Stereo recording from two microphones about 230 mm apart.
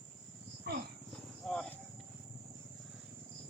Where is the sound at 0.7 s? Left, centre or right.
Right.